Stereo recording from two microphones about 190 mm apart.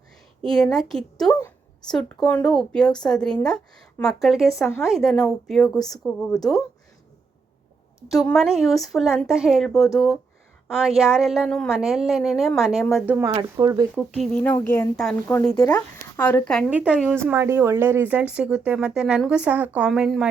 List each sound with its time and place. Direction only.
0.4 s a woman's voice: 5° left (ahead or behind)
8.0 s a woman's voice: centre (ahead or behind)
13.2 s speech: 20° right (ahead or behind)
14.2 s a woman's voice: 5° left (ahead or behind)